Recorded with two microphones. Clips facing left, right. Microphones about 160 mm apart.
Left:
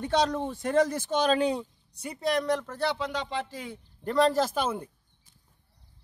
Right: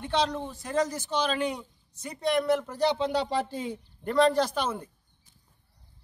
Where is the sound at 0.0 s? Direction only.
45° left (ahead or behind).